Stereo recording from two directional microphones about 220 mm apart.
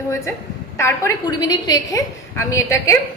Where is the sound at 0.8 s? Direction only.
15° left (ahead or behind).